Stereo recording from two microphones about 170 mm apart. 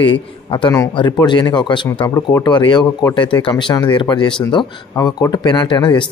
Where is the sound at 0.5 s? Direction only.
25° left (ahead or behind).